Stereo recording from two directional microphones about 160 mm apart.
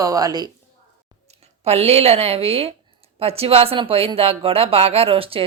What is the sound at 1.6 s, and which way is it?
Speech, 40° right (ahead or behind).